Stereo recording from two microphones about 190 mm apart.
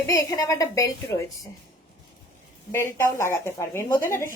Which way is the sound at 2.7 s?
15° left (ahead or behind).